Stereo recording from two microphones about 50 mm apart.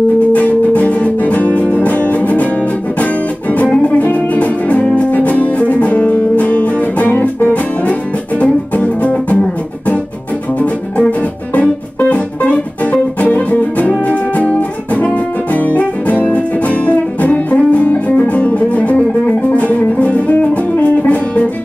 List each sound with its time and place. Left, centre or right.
0.3 s music: left
3.5 s music: left
10.6 s music: left